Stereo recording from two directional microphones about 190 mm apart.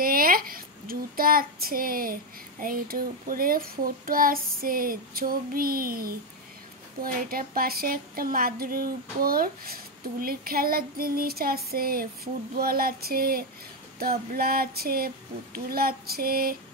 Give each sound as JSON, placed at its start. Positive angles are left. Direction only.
{"t": 0.0, "sound": "child singing", "side_deg": -50}